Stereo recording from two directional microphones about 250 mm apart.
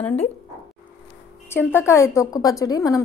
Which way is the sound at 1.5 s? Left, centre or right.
Centre.